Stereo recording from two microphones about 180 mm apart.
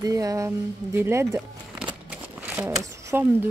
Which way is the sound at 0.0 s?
20° right (ahead or behind).